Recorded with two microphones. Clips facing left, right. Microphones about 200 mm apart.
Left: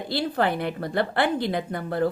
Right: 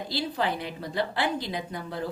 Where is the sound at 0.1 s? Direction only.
55° left (ahead or behind).